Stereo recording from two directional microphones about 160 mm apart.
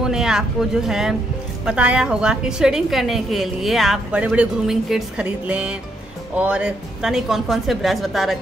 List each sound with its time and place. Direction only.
0.0 s a woman's voice: 5° right (ahead or behind)